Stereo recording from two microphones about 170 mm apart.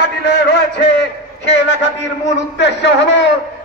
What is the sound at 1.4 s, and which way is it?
A man's voice, 90° left.